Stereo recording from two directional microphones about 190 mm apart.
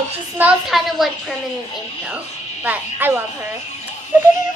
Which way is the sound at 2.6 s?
10° right (ahead or behind).